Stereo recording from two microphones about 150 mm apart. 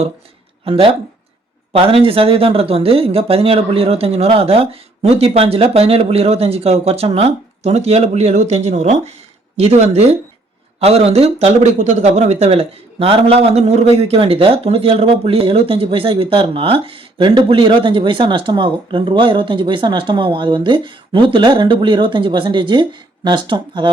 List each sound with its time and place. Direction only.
0.6 s a man's voice: 35° right (ahead or behind)